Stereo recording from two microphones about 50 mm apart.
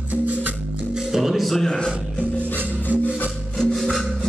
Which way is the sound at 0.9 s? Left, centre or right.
Centre.